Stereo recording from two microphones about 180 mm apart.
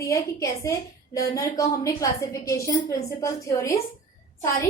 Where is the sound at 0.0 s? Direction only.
15° left (ahead or behind).